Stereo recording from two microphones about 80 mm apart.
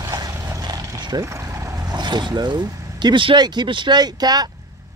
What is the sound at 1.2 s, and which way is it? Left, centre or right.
Speech, right.